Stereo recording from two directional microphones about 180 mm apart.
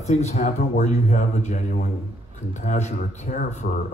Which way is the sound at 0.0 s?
40° left (ahead or behind).